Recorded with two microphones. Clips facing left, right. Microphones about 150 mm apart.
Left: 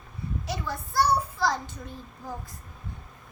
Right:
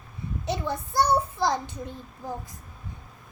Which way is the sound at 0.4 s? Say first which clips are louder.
Right 7 dB; 20° right (ahead or behind).